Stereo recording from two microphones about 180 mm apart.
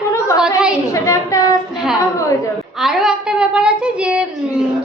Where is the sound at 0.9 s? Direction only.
15° left (ahead or behind).